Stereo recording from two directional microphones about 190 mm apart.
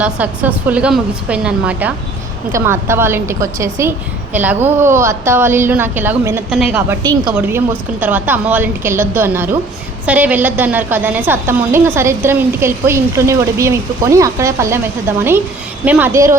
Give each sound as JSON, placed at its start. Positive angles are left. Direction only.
{"t": 0.0, "sound": "a woman's voice", "side_deg": -10}
{"t": 7.0, "sound": "a woman's voice", "side_deg": -20}
{"t": 7.3, "sound": "a woman's voice", "side_deg": -10}